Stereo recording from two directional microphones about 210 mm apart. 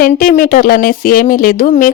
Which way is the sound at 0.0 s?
40° left (ahead or behind).